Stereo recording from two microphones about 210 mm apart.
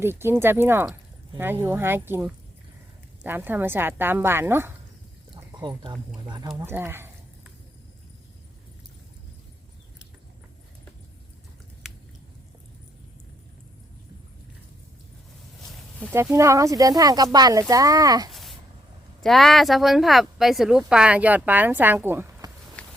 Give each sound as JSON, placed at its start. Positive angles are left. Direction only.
{"t": 0.0, "sound": "speech", "side_deg": -10}
{"t": 6.6, "sound": "speech", "side_deg": -10}
{"t": 16.3, "sound": "speech", "side_deg": -15}
{"t": 18.3, "sound": "a sound", "side_deg": 0}
{"t": 19.2, "sound": "speech", "side_deg": 0}
{"t": 22.8, "sound": "a sound", "side_deg": 5}